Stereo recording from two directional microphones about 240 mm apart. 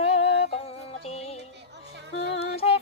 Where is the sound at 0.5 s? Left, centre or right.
Left.